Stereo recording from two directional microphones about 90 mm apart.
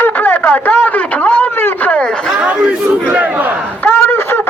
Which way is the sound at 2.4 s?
15° right (ahead or behind).